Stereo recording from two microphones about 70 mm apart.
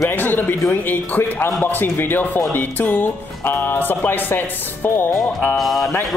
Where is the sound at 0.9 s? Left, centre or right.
Left.